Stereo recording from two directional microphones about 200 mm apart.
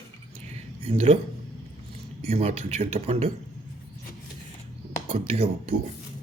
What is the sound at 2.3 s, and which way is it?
Speech, 30° right (ahead or behind).